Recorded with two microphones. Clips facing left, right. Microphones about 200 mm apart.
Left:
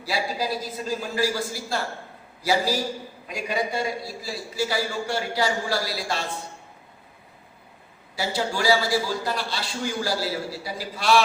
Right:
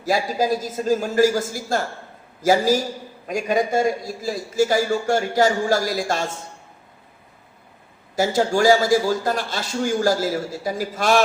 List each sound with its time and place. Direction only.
0.0 s a man's voice: 45° right (ahead or behind)
8.1 s a man's voice: 45° right (ahead or behind)